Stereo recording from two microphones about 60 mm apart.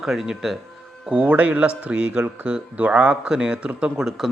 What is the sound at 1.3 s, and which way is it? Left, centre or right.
Speech, right.